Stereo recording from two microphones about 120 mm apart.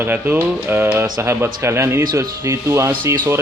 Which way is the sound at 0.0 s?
15° right (ahead or behind).